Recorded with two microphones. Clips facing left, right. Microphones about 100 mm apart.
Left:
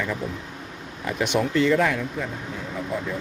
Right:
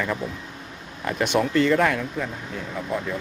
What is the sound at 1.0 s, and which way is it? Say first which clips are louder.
Speech: right 1 dB; 20° left (ahead or behind).